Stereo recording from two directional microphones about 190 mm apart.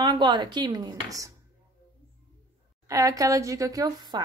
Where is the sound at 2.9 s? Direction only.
15° right (ahead or behind).